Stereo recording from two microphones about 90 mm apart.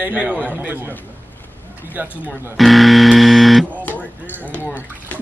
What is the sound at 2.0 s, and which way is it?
Speech, 20° right (ahead or behind).